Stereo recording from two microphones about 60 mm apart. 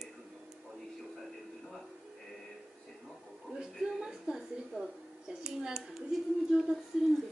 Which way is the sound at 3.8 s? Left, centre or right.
Centre.